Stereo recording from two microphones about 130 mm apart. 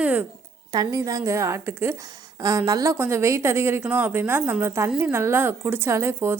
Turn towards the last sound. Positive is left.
turn(degrees=-20)  # may be behind; listen again after turning